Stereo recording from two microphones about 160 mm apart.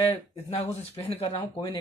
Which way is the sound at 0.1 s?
35° left (ahead or behind).